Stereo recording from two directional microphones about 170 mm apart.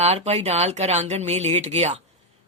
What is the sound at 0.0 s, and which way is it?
Speech, 40° right (ahead or behind).